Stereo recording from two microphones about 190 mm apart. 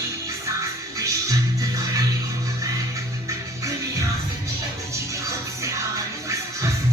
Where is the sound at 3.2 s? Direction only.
15° right (ahead or behind).